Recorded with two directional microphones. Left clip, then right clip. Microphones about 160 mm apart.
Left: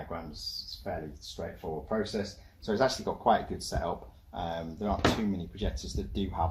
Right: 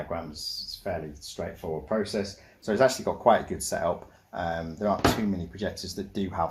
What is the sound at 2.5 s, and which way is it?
Speech, 40° right (ahead or behind).